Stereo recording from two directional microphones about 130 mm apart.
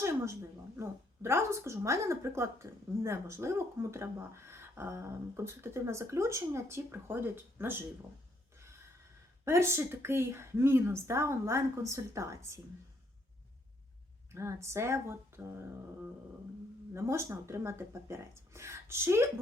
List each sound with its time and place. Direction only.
0.8 s a woman's voice: 20° right (ahead or behind)
8.5 s a sound: 20° right (ahead or behind)
9.4 s a woman's voice: 20° right (ahead or behind)
14.3 s a woman's voice: 20° right (ahead or behind)
16.9 s a woman's voice: 20° right (ahead or behind)